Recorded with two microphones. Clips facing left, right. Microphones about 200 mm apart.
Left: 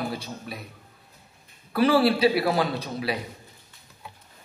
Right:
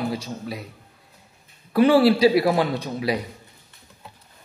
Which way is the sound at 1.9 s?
25° right (ahead or behind).